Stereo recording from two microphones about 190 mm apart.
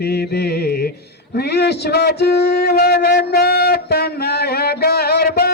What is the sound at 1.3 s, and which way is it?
Speech, 60° left (ahead or behind).